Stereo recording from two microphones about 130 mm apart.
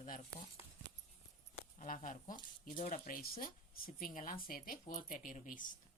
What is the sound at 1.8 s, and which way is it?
Speech, 80° left.